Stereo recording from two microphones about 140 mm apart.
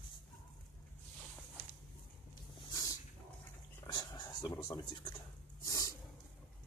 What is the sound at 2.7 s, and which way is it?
Dog, 25° left (ahead or behind).